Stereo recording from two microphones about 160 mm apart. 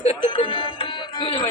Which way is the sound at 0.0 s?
35° left (ahead or behind).